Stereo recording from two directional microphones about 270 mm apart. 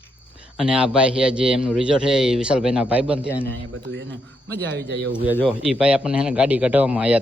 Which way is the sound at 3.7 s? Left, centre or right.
Right.